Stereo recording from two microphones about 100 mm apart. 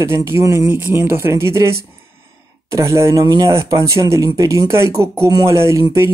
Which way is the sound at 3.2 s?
45° right (ahead or behind).